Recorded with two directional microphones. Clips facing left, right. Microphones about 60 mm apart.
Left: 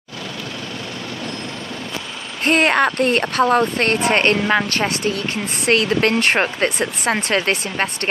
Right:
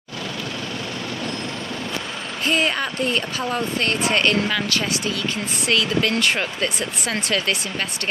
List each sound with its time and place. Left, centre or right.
2.4 s speech: left